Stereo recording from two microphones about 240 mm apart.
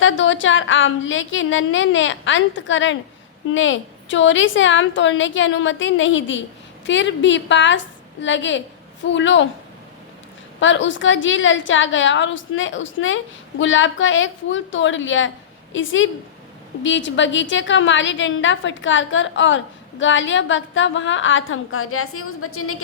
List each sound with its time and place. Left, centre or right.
0.0 s a woman's voice: left
10.6 s a woman's voice: left